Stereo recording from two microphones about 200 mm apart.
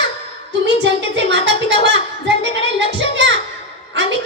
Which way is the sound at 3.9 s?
65° right (ahead or behind).